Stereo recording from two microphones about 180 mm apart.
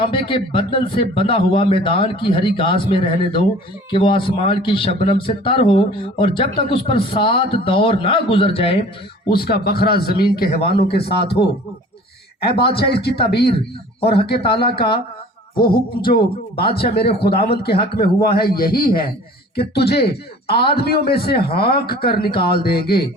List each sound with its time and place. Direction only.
0.0 s speech: 30° left (ahead or behind)
9.3 s a man's voice: 60° left (ahead or behind)
10.7 s speech: 30° left (ahead or behind)
10.9 s a man's voice: 60° left (ahead or behind)
12.5 s a man's voice: 65° left (ahead or behind)